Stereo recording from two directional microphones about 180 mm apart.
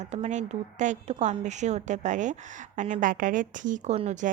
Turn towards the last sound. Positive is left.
turn(degrees=-40)  # may be behind; listen again after turning